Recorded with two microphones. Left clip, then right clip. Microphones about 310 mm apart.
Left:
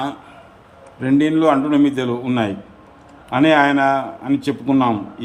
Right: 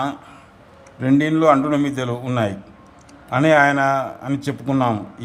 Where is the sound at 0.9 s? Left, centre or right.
Centre.